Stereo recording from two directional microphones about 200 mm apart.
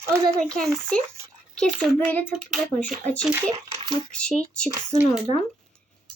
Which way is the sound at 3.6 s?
25° right (ahead or behind).